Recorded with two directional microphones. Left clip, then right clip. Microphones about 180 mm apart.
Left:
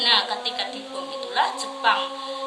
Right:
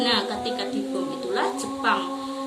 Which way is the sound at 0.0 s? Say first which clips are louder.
Left 3 dB; centre (ahead or behind).